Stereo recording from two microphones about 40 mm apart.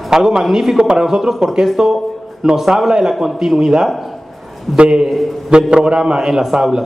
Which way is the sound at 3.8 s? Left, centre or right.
Centre.